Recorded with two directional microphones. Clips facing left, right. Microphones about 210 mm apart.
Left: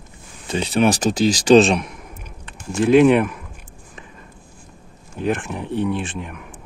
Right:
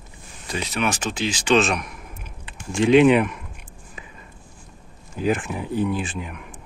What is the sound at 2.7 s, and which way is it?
Speech, centre (ahead or behind).